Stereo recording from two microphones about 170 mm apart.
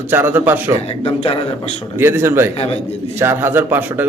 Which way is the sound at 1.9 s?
15° right (ahead or behind).